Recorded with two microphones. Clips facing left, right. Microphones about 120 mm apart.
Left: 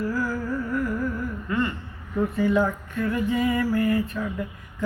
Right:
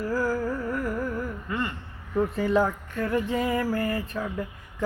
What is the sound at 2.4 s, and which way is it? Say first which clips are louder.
Mantra: left 3 dB; 30° right (ahead or behind).